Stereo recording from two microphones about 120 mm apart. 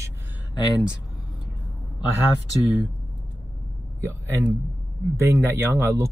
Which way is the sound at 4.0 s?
25° right (ahead or behind).